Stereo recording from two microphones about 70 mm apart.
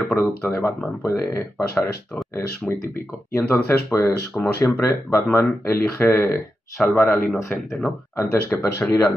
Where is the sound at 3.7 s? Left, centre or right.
Left.